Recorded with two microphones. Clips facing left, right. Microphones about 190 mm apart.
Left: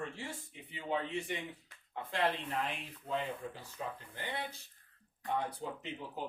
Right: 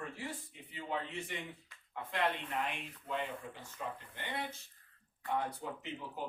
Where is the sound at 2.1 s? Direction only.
30° left (ahead or behind).